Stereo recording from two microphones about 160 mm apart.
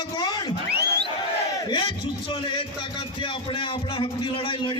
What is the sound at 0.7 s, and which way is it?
Crowd, 90° right.